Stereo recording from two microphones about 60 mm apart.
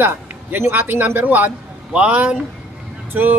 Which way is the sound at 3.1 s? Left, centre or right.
Right.